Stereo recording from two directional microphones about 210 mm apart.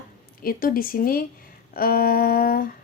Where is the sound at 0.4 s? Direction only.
45° left (ahead or behind).